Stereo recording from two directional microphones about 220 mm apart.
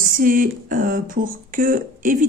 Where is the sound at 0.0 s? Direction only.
40° right (ahead or behind).